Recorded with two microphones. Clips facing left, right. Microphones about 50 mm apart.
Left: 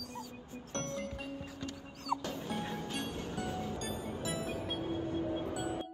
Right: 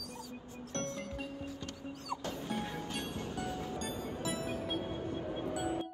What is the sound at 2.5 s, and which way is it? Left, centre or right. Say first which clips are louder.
Music: right 1 dB; centre.